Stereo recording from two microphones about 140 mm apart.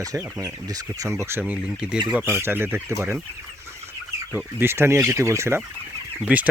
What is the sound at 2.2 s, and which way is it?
Speech, 15° right (ahead or behind).